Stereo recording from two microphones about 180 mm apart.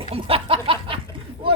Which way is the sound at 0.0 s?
30° right (ahead or behind).